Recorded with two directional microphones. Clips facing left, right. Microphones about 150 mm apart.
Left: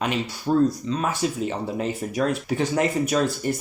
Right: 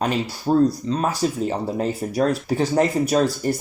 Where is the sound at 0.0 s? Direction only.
35° right (ahead or behind).